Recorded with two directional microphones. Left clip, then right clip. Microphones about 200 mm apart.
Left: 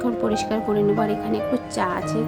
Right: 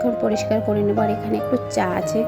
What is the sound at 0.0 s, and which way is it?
Speech, 5° right (ahead or behind).